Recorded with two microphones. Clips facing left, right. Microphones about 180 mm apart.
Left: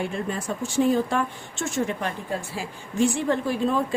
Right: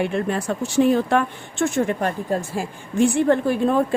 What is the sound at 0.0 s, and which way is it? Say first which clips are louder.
Speech: right 6 dB; 70° right (ahead or behind).